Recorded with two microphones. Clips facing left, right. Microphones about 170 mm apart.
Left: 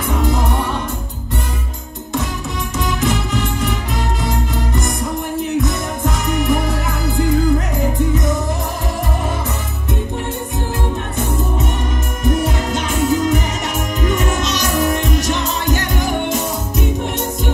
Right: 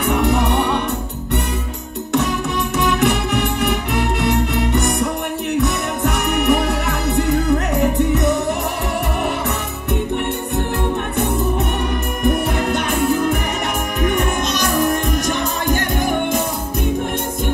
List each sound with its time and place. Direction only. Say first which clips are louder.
0.0 s music: right 2 dB; 65° right (ahead or behind)
2.8 s music: right 2 dB; 65° right (ahead or behind)
12.2 s music: even; 60° right (ahead or behind)